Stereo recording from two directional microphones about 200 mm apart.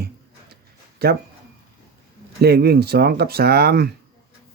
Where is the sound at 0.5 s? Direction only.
50° right (ahead or behind).